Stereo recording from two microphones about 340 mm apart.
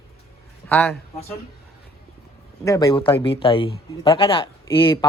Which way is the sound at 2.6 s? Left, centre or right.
Centre.